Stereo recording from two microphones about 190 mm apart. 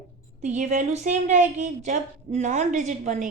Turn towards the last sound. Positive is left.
turn(degrees=-40)  # may be behind; listen again after turning